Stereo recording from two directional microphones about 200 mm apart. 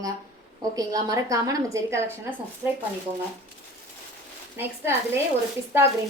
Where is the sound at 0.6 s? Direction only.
15° right (ahead or behind).